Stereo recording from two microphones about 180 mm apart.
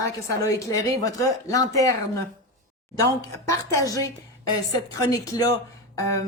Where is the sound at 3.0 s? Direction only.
20° left (ahead or behind).